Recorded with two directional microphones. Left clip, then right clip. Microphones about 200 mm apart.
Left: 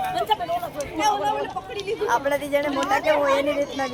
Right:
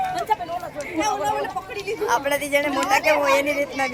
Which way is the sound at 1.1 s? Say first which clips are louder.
Right 1 dB; 35° right (ahead or behind).